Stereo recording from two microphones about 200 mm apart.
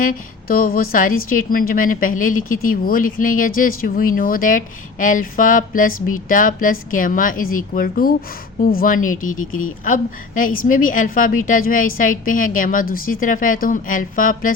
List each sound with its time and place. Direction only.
0.0 s speech: 45° left (ahead or behind)
9.5 s speech: 90° left
9.8 s speech: 40° left (ahead or behind)